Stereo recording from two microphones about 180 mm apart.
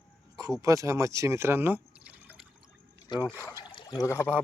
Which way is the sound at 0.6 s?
15° right (ahead or behind).